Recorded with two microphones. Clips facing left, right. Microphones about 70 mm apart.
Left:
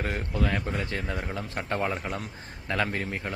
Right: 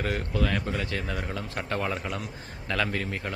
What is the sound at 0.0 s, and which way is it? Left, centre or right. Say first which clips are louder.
Speech: right 1 dB; centre.